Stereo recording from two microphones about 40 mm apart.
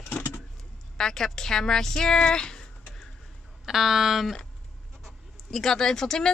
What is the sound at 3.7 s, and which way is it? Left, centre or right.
Speech, centre.